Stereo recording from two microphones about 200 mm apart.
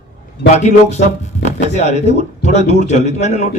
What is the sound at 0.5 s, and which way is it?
Speech, 35° left (ahead or behind).